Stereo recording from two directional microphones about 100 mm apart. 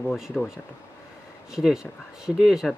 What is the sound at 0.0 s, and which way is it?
Speech, centre (ahead or behind).